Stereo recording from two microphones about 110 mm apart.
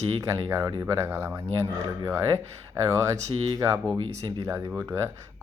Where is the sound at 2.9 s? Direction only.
30° right (ahead or behind).